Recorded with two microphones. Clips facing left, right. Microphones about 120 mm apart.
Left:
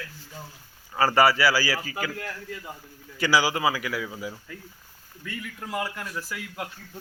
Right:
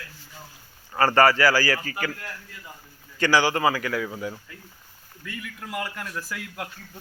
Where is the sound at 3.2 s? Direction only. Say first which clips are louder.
Right 2 dB; 10° left (ahead or behind).